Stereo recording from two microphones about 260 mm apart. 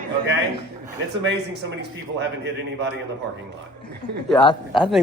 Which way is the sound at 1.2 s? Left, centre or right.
Right.